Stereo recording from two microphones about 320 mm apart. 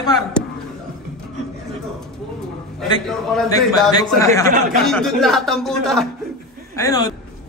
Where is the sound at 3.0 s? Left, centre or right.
Centre.